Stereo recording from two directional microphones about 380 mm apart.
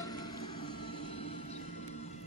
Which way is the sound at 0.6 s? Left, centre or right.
Centre.